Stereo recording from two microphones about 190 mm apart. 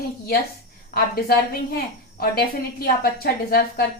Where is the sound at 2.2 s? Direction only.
50° left (ahead or behind).